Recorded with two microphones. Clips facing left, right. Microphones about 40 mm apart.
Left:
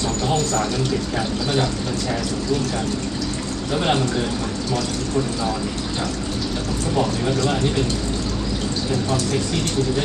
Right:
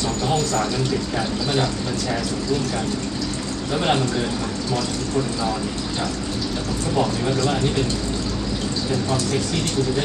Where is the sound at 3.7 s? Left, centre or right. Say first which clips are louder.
Even; centre.